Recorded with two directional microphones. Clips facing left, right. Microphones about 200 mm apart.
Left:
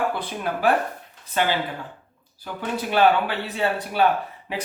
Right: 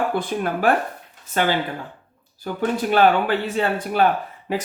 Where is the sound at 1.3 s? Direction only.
50° right (ahead or behind).